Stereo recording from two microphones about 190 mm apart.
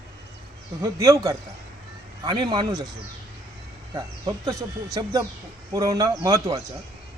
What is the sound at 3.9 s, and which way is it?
Speech, 20° right (ahead or behind).